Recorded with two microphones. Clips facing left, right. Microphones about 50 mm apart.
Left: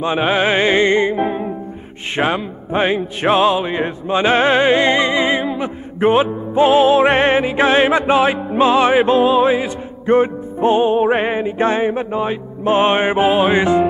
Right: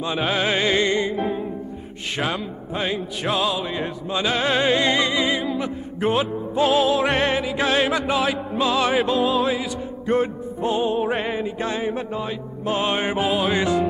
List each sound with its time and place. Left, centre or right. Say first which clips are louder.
0.0 s music: left 6 dB; left
2.1 s speech: left 8 dB; left